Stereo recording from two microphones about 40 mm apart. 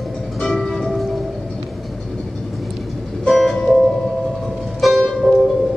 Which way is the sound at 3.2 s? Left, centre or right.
Centre.